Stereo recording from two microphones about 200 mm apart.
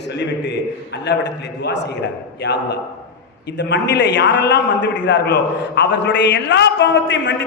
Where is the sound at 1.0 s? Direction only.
60° left (ahead or behind).